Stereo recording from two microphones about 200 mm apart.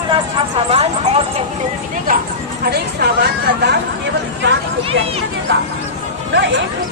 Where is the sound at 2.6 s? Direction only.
50° right (ahead or behind).